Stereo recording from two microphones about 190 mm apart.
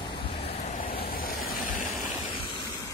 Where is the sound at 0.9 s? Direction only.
50° left (ahead or behind).